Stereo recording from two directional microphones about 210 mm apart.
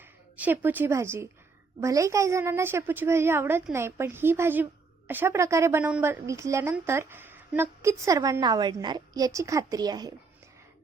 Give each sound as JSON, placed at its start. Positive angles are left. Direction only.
{"t": 0.3, "sound": "a woman's voice", "side_deg": -10}